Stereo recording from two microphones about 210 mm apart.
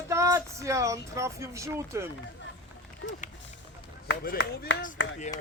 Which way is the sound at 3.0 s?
55° left (ahead or behind).